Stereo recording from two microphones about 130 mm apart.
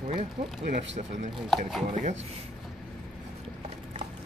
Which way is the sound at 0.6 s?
90° right.